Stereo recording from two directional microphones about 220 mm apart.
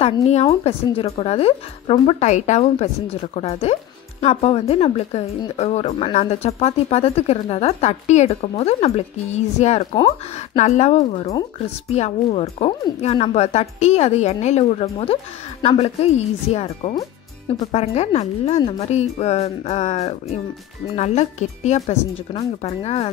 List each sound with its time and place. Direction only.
0.0 s a woman's voice: 30° left (ahead or behind)